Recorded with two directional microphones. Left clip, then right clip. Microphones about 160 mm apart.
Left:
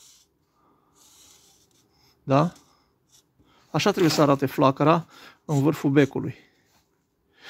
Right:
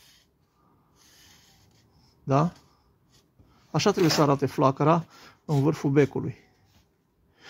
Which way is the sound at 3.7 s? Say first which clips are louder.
Left 1 dB; 20° left (ahead or behind).